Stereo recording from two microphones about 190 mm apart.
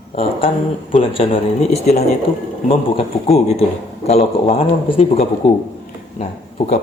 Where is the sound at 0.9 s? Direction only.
30° left (ahead or behind).